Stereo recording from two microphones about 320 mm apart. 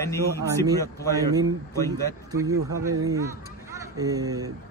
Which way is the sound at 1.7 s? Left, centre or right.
Centre.